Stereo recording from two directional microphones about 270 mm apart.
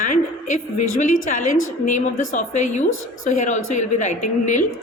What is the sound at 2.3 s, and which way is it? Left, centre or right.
A woman's voice, left.